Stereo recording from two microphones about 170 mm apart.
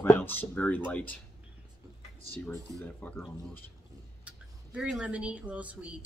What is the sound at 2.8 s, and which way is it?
Speech, 10° left (ahead or behind).